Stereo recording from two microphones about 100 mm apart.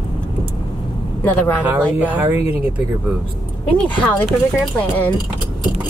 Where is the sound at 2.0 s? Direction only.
15° right (ahead or behind).